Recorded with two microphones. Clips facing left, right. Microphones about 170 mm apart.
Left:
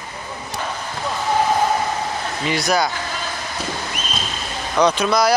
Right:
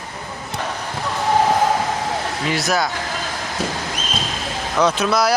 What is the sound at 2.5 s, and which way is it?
Speech, centre (ahead or behind).